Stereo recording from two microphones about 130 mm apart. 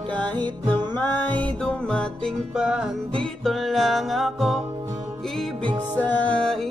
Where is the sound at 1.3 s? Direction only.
10° left (ahead or behind).